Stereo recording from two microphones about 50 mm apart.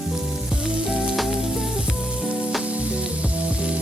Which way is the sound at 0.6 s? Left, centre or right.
Centre.